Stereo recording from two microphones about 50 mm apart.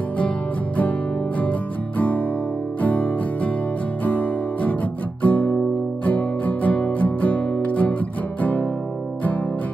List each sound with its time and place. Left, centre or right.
1.4 s music: left